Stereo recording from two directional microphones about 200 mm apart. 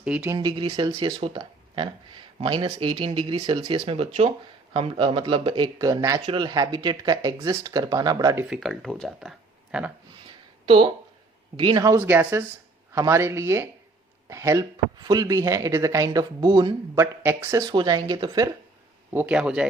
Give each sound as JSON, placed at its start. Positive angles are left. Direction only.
{"t": 0.0, "sound": "speech", "side_deg": -5}
{"t": 0.3, "sound": "speech", "side_deg": -25}
{"t": 8.4, "sound": "speech", "side_deg": -5}
{"t": 10.7, "sound": "speech", "side_deg": -25}
{"t": 19.1, "sound": "speech", "side_deg": -5}